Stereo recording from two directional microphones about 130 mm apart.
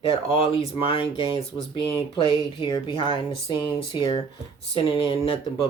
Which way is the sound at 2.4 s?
35° left (ahead or behind).